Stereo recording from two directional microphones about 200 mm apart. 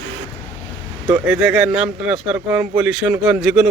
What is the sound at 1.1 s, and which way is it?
Speech, 5° right (ahead or behind).